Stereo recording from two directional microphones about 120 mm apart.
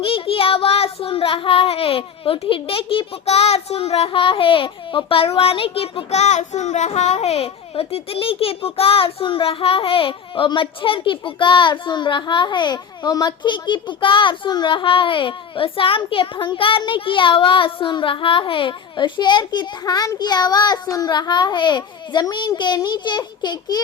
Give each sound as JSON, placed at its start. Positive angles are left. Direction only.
{"t": 0.0, "sound": "child singing", "side_deg": 50}